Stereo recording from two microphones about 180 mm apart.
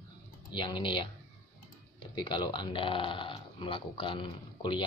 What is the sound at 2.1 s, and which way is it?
Speech, 25° left (ahead or behind).